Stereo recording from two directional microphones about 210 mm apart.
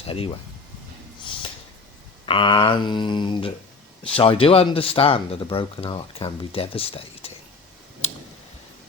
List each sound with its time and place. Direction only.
2.2 s speech: 25° left (ahead or behind)
8.0 s tick: 30° left (ahead or behind)